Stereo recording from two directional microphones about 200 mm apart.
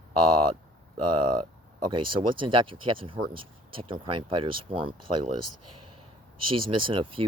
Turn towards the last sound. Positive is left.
turn(degrees=-25)  # may be behind; listen again after turning